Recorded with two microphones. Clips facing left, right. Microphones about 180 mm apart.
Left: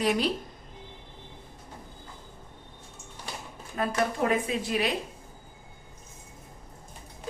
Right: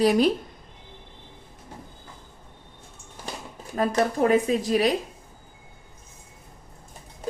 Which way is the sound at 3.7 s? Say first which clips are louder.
Right 5 dB; 35° right (ahead or behind).